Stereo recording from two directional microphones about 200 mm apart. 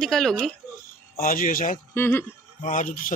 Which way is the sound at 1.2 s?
45° left (ahead or behind).